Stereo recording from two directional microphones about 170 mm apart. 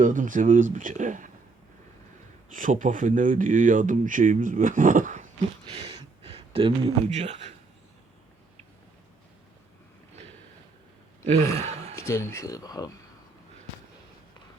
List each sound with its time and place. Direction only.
0.0 s speech: 50° right (ahead or behind)
2.5 s speech: 50° right (ahead or behind)
5.7 s speech: 30° right (ahead or behind)
11.5 s a sound: 40° right (ahead or behind)
11.9 s speech: 15° left (ahead or behind)